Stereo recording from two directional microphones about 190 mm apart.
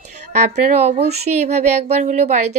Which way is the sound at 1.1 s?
35° right (ahead or behind).